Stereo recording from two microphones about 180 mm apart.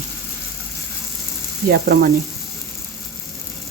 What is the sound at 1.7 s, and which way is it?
Speech, 55° right (ahead or behind).